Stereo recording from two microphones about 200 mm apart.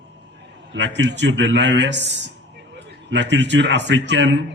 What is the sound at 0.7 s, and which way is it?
Speech, 65° right (ahead or behind).